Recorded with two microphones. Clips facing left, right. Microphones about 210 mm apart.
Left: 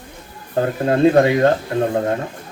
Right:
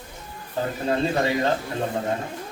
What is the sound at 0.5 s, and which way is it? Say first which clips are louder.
Speech: left 7 dB; 55° left (ahead or behind).